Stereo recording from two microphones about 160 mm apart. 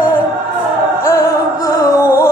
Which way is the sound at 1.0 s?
15° left (ahead or behind).